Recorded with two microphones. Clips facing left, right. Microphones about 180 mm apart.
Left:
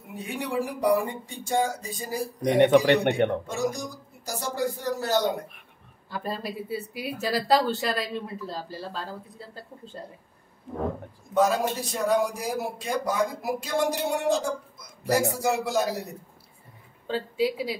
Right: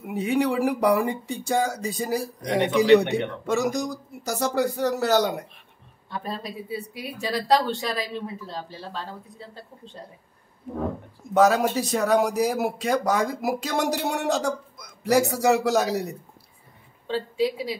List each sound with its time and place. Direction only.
0.0 s a man's voice: 75° right (ahead or behind)
2.6 s a man's voice: 55° left (ahead or behind)
3.4 s a man's voice: 80° right
6.0 s speech: centre (ahead or behind)
11.3 s a man's voice: 75° right (ahead or behind)
17.1 s speech: 5° left (ahead or behind)